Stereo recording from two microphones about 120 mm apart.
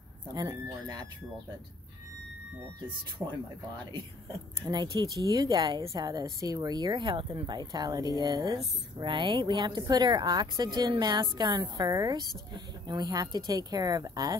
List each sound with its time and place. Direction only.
0.3 s speech: 35° right (ahead or behind)
3.2 s speech: 25° right (ahead or behind)
4.6 s speech: 35° right (ahead or behind)
9.0 s speech: 45° right (ahead or behind)